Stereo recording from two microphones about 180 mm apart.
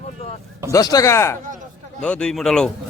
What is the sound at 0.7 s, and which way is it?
Speech, 20° left (ahead or behind).